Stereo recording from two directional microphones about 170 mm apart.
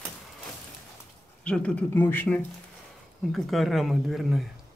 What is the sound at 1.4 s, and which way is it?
Speech, 5° left (ahead or behind).